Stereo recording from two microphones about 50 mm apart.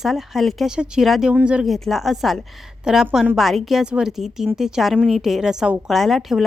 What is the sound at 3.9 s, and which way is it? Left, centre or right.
A woman's voice, centre.